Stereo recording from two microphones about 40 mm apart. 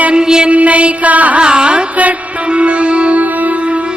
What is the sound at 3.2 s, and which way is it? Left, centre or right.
Music, right.